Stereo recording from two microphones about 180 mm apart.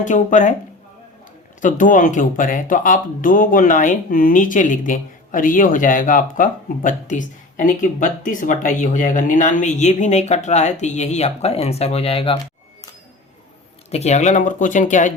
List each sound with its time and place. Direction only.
0.0 s speech: 45° left (ahead or behind)
1.6 s speech: 45° left (ahead or behind); by 12.4 s 30° left (ahead or behind)
13.9 s speech: 40° left (ahead or behind)